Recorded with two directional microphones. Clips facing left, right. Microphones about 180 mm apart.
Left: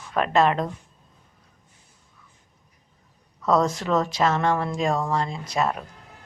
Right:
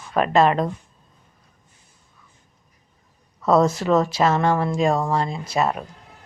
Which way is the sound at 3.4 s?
5° right (ahead or behind).